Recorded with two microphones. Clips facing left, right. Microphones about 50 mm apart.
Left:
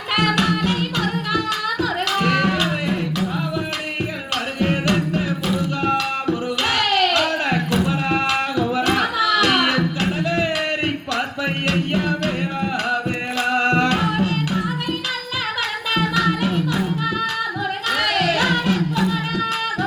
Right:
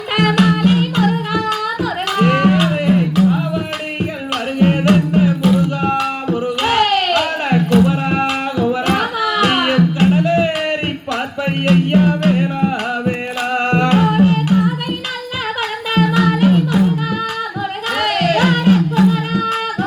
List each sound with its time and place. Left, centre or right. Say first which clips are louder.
0.2 s music: right 6 dB; centre
5.1 s music: right 8 dB; centre
16.0 s music: right 6 dB; centre
17.9 s music: right 4 dB; centre